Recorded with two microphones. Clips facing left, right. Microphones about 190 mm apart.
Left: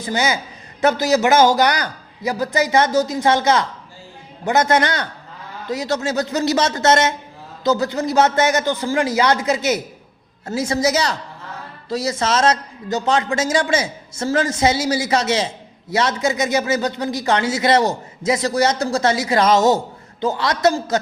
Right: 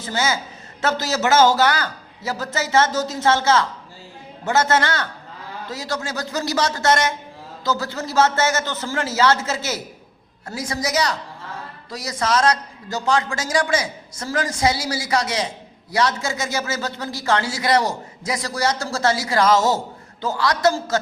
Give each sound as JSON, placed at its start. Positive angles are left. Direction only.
{"t": 0.0, "sound": "a man's voice", "side_deg": 15}